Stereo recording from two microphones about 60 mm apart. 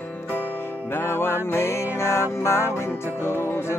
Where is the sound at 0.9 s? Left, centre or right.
Left.